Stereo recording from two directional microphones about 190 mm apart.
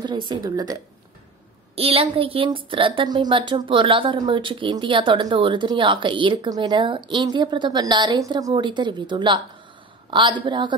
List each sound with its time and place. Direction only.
0.0 s a woman's voice: 25° right (ahead or behind)
1.8 s a woman's voice: 30° right (ahead or behind)